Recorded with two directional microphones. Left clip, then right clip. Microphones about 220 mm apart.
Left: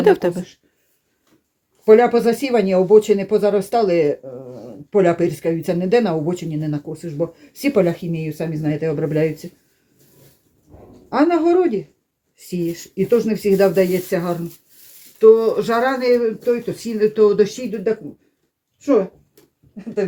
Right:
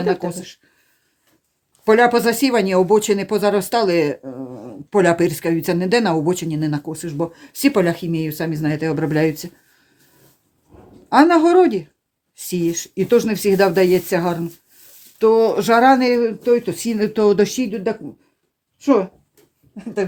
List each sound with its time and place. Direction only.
0.2 s speech: 35° left (ahead or behind)
1.8 s speech: 55° right (ahead or behind)
11.1 s speech: 55° right (ahead or behind)